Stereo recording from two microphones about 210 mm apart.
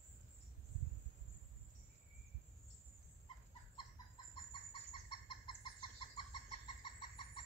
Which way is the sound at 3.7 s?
20° left (ahead or behind).